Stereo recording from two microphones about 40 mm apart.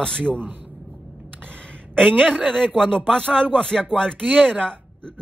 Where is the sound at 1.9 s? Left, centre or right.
Centre.